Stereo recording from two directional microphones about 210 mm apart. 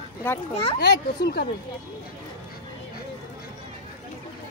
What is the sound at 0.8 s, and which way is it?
Speech, 50° left (ahead or behind).